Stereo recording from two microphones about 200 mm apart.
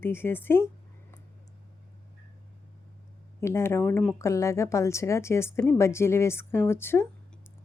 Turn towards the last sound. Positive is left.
turn(degrees=10)  # may be behind; listen again after turning